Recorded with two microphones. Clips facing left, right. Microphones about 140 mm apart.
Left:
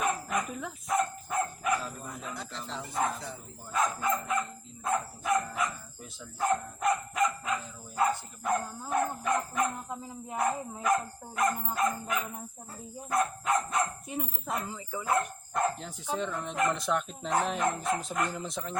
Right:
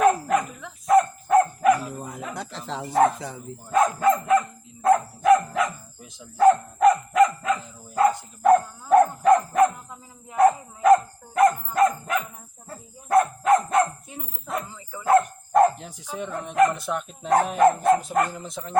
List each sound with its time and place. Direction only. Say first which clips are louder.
0.0 s dog: right 11 dB; 70° right (ahead or behind)
0.9 s dog: right 12 dB; 55° right (ahead or behind)
2.0 s dog: right 6 dB; 90° right; by 4.4 s 60° right (ahead or behind)
4.8 s dog: right 12 dB; 90° right
8.5 s dog: right 11 dB; 55° right (ahead or behind)
15.0 s dog: right 11 dB; 55° right (ahead or behind)
16.1 s speech: right 9 dB; 10° right (ahead or behind)
17.6 s bow-wow: right 12 dB; 60° right (ahead or behind)
18.3 s speech: right 1 dB; centre (ahead or behind)